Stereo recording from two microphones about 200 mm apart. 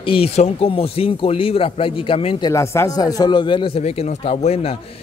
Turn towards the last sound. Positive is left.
turn(degrees=30)  # may be behind; listen again after turning